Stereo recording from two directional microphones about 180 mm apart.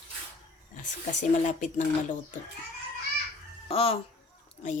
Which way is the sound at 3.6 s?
30° left (ahead or behind).